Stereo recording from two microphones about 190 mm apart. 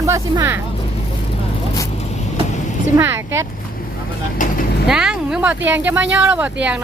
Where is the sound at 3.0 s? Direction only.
10° right (ahead or behind).